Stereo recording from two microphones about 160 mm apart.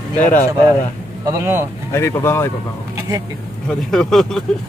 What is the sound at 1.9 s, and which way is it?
Speech, 15° left (ahead or behind).